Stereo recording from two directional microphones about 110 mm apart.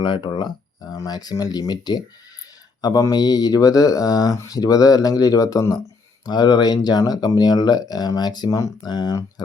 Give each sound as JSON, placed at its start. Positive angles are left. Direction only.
{"t": 0.0, "sound": "speech", "side_deg": 45}